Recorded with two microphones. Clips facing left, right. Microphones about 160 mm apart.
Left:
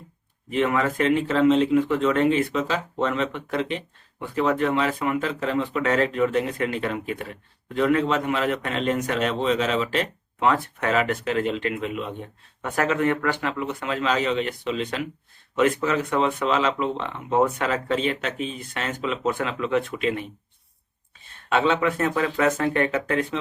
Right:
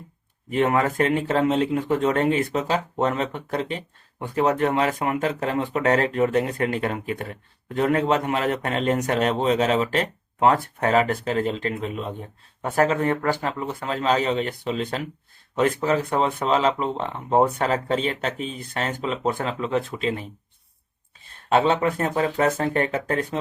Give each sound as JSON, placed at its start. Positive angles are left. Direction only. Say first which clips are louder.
{"t": 0.5, "sound": "speech", "louder": "right 2 dB", "side_deg": -40}
{"t": 21.5, "sound": "speech", "louder": "right 2 dB", "side_deg": -40}